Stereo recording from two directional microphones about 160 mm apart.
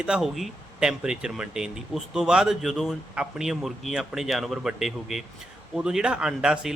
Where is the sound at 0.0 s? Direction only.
5° right (ahead or behind).